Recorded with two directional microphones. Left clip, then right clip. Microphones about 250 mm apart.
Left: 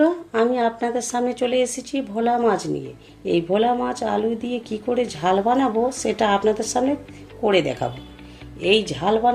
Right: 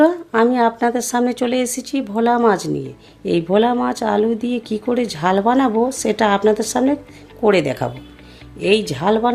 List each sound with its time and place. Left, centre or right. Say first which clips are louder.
0.0 s speech: right 5 dB; right